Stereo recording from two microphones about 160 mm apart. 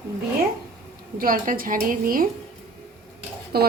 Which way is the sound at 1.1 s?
60° right (ahead or behind).